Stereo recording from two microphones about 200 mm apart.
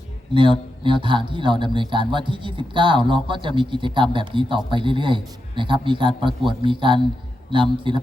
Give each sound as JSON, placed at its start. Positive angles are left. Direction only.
{"t": 0.3, "sound": "a man's voice", "side_deg": -25}